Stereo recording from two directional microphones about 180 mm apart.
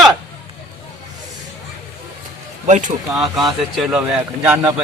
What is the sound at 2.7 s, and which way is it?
Speech, 45° right (ahead or behind).